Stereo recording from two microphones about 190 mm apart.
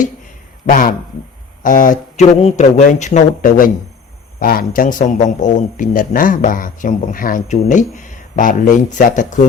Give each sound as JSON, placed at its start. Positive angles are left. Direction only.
{"t": 0.7, "sound": "a man's voice", "side_deg": 50}